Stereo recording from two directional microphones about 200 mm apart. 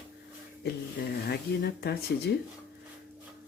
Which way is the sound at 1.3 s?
55° left (ahead or behind).